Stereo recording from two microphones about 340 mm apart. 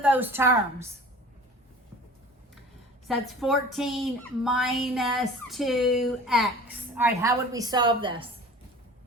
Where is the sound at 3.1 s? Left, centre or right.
Centre.